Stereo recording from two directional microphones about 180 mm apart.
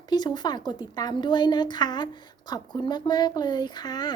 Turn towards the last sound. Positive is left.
turn(degrees=25)  # may be behind; listen again after turning